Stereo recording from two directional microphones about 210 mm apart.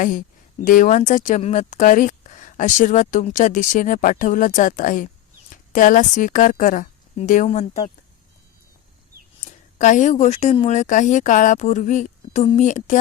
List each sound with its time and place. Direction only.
0.0 s speech: 40° left (ahead or behind)
9.4 s speech: 35° left (ahead or behind)